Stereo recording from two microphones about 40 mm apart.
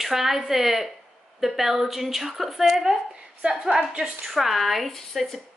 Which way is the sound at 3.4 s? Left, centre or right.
Right.